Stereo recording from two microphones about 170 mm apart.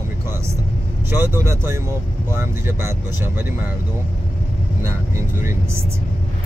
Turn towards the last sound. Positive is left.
turn(degrees=-15)  # may be behind; listen again after turning